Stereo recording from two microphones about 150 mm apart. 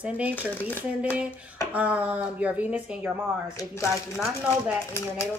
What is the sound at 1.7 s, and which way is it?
Speech, 10° right (ahead or behind).